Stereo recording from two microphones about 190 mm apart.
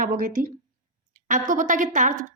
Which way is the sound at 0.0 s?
45° right (ahead or behind).